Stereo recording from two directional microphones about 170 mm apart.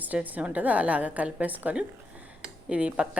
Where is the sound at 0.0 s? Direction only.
10° right (ahead or behind).